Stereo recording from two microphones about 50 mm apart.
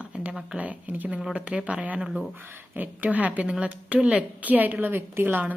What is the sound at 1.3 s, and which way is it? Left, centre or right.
A woman's voice, right.